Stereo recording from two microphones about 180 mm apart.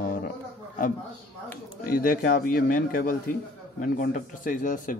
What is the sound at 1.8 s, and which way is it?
Speech, 50° left (ahead or behind).